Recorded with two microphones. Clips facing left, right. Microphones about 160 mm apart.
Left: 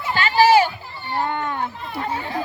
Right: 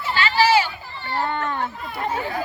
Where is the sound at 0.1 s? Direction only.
45° left (ahead or behind).